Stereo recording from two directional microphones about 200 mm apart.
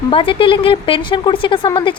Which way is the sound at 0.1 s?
25° left (ahead or behind).